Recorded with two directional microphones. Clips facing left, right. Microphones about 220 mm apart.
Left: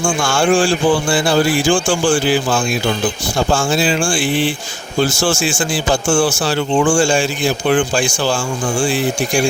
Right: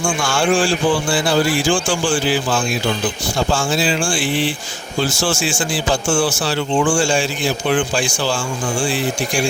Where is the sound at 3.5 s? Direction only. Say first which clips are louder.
Left 3 dB; 50° left (ahead or behind).